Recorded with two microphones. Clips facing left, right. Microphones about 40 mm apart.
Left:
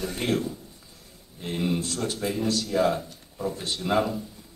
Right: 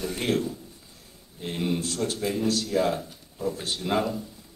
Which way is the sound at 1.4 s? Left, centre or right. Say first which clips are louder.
Left 1 dB; centre.